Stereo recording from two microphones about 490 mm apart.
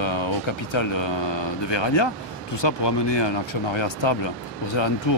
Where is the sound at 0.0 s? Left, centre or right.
Left.